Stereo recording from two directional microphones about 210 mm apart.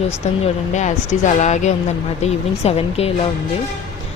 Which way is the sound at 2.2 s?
30° left (ahead or behind).